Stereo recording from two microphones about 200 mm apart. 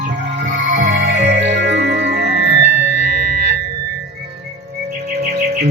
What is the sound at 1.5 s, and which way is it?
Music, 60° right (ahead or behind).